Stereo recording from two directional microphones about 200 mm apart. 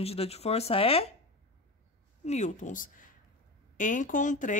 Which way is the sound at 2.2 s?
35° left (ahead or behind).